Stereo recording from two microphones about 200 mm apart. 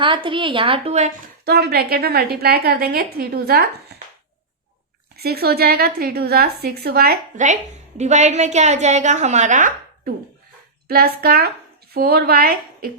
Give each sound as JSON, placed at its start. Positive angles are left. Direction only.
{"t": 0.0, "sound": "speech", "side_deg": -25}
{"t": 1.5, "sound": "a woman's voice", "side_deg": -50}
{"t": 5.1, "sound": "a woman's voice", "side_deg": -50}